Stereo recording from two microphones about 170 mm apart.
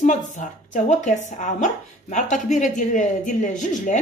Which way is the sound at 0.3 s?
45° left (ahead or behind).